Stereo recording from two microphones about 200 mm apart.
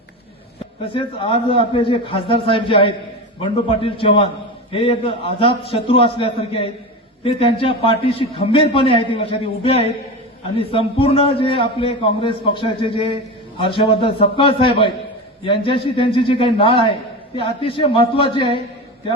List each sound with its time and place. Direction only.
0.9 s a man's voice: 25° left (ahead or behind)